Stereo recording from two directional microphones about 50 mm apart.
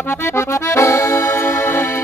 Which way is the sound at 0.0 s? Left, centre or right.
Left.